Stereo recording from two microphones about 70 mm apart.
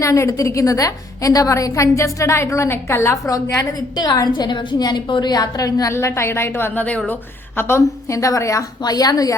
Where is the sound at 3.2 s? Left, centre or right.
Left.